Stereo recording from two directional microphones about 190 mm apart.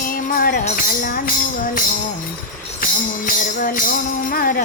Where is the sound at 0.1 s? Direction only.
50° left (ahead or behind).